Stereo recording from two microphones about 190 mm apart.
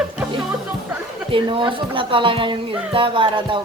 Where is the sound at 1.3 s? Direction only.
25° right (ahead or behind).